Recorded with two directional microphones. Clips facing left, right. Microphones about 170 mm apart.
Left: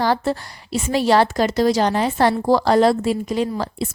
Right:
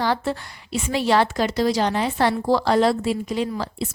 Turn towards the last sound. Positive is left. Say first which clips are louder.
# left 3 dB
turn(degrees=45)  # may be behind; listen again after turning